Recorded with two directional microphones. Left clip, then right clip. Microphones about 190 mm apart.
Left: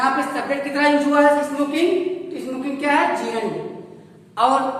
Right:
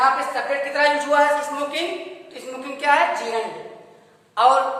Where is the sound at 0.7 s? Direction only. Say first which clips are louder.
Even; 35° right (ahead or behind).